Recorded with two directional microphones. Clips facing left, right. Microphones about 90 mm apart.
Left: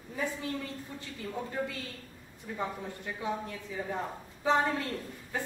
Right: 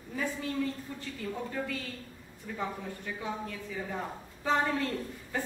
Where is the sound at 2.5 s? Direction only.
20° left (ahead or behind).